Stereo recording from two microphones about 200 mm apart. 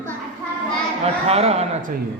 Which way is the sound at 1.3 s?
30° right (ahead or behind).